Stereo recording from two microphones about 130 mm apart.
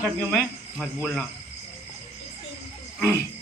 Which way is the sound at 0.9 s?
10° left (ahead or behind).